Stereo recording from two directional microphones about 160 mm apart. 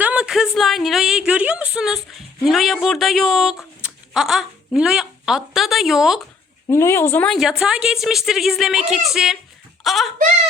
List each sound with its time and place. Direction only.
0.0 s a woman's voice: 5° right (ahead or behind)
6.7 s speech: 15° left (ahead or behind)
7.3 s a woman's voice: centre (ahead or behind)